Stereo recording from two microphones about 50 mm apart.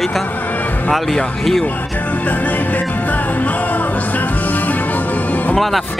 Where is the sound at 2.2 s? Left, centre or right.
Left.